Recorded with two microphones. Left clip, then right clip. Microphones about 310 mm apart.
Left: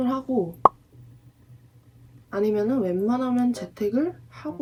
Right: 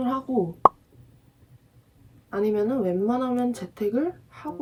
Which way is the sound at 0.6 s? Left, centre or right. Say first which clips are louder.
Even; centre.